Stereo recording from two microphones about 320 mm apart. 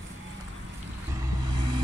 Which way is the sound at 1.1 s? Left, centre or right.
Centre.